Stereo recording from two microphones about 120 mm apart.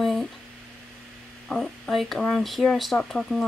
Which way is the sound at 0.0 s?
Centre (ahead or behind).